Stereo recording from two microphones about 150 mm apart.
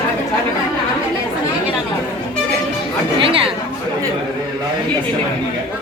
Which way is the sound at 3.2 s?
35° right (ahead or behind).